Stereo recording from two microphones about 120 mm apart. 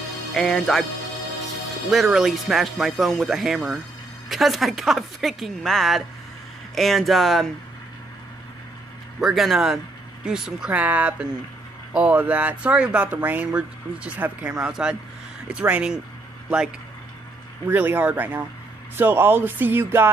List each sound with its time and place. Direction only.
0.3 s speech: 5° left (ahead or behind)
1.9 s speech: centre (ahead or behind)
9.2 s speech: centre (ahead or behind)
17.6 s speech: 15° right (ahead or behind)